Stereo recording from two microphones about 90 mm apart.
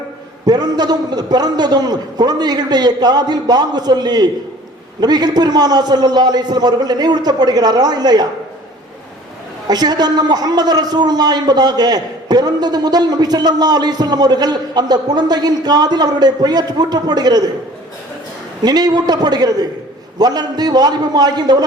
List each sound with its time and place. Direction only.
0.4 s a man's voice: 50° right (ahead or behind)
9.6 s a man's voice: 50° right (ahead or behind)
18.6 s a man's voice: 50° right (ahead or behind)